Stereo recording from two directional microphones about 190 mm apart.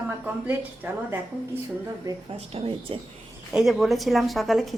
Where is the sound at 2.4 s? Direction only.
30° right (ahead or behind).